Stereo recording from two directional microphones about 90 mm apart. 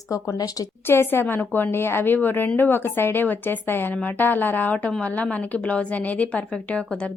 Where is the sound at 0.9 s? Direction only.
25° left (ahead or behind).